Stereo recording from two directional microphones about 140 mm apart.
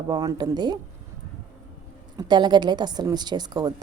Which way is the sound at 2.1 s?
35° right (ahead or behind).